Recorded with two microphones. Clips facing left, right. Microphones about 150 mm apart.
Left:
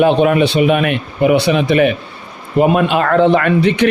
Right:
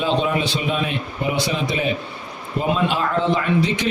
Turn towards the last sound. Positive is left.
turn(degrees=65)  # may be behind; listen again after turning